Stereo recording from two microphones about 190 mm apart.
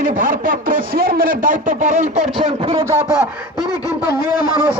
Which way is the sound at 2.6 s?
20° right (ahead or behind).